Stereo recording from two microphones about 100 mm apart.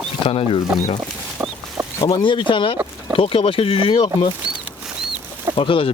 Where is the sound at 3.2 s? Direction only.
70° left (ahead or behind).